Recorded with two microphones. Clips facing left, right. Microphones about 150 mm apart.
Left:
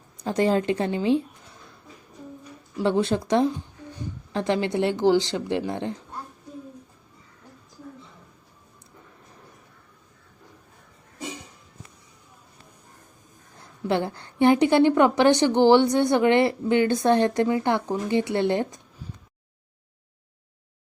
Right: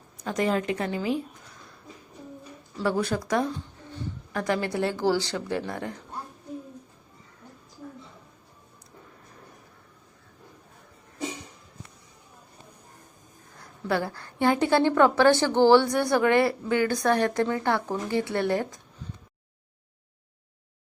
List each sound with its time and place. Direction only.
0.2 s a woman's voice: 30° left (ahead or behind)
2.8 s a woman's voice: 25° left (ahead or behind)
13.6 s a woman's voice: 25° left (ahead or behind)